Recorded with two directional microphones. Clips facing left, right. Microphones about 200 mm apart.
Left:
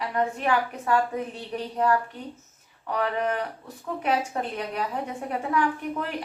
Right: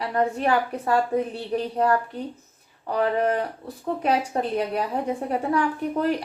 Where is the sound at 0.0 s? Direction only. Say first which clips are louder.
Right 3 dB; 35° right (ahead or behind).